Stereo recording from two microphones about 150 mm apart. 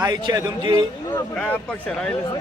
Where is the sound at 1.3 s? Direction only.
10° left (ahead or behind).